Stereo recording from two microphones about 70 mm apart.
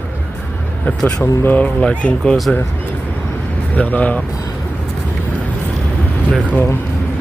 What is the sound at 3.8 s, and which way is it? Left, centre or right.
Speech, left.